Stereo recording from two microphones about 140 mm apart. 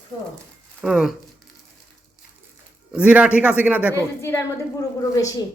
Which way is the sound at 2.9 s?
10° right (ahead or behind).